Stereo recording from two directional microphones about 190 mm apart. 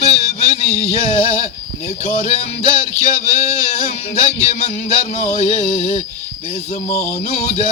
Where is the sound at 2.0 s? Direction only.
40° left (ahead or behind).